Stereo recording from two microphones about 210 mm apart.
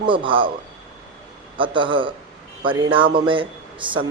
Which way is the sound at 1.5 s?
25° right (ahead or behind).